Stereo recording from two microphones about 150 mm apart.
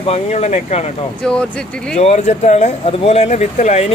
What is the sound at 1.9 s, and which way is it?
Speech, 50° left (ahead or behind).